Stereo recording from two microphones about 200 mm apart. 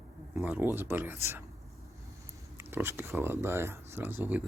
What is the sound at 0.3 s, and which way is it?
Speech, 5° right (ahead or behind).